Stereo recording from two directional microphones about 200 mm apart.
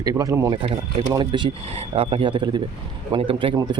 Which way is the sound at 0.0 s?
15° right (ahead or behind).